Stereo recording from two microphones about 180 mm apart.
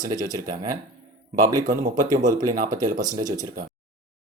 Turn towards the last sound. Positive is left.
turn(degrees=-20)  # may be behind; listen again after turning